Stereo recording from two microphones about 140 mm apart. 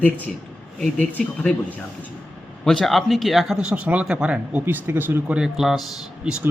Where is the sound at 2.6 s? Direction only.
Centre (ahead or behind).